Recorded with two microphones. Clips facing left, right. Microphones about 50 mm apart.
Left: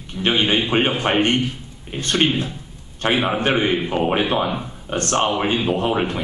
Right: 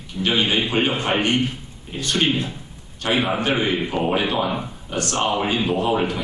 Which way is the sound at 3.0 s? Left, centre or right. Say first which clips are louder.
Left 2 dB; left.